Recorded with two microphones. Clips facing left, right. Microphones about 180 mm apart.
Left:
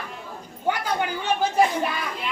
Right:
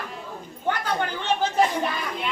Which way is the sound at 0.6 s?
10° left (ahead or behind).